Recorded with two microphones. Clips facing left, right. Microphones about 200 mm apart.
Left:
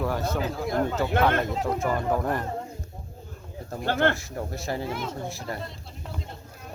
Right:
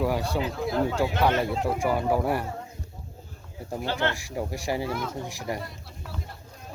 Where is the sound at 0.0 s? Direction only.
10° right (ahead or behind).